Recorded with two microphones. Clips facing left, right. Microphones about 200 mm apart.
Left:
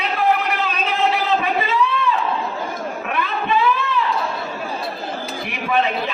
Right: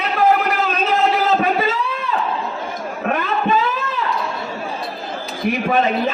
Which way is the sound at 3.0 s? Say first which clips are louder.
Right 6 dB; 40° right (ahead or behind).